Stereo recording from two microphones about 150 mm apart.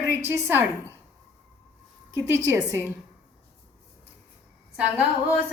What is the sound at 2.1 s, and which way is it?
Speech, 20° right (ahead or behind).